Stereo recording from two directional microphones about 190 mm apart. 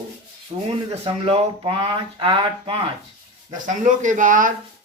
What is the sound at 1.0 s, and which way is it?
Speech, 30° right (ahead or behind).